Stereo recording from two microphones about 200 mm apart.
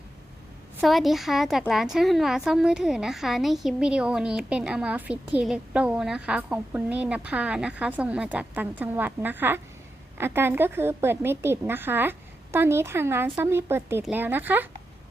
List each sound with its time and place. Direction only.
0.8 s a woman's voice: centre (ahead or behind)